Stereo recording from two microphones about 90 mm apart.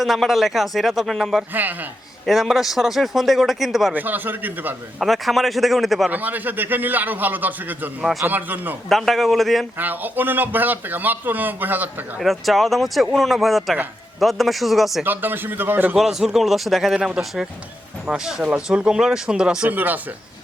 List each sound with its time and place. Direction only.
0.0 s a man's voice: centre (ahead or behind)
1.5 s speech: 20° right (ahead or behind)
2.2 s a man's voice: centre (ahead or behind)
3.9 s speech: 20° right (ahead or behind)
4.9 s a man's voice: centre (ahead or behind)
6.1 s speech: 20° right (ahead or behind)
8.9 s a man's voice: centre (ahead or behind)
9.7 s speech: 20° right (ahead or behind)
12.2 s a man's voice: centre (ahead or behind)
15.0 s speech: 20° right (ahead or behind)
16.0 s a man's voice: 5° right (ahead or behind)